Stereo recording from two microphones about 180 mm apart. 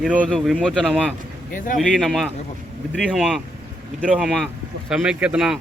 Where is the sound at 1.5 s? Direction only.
45° left (ahead or behind).